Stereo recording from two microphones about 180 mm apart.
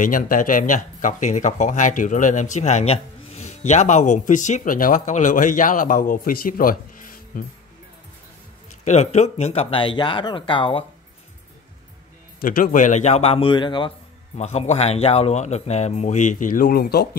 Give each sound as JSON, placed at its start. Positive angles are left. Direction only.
{"t": 0.0, "sound": "speech", "side_deg": 50}
{"t": 8.6, "sound": "speech", "side_deg": 40}
{"t": 12.4, "sound": "a man's voice", "side_deg": 50}